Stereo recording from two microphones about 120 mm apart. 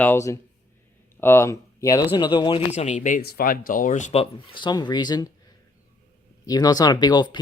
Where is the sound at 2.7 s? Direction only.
75° left (ahead or behind).